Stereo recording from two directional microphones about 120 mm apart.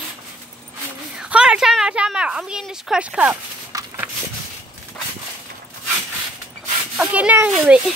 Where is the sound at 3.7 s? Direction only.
30° right (ahead or behind).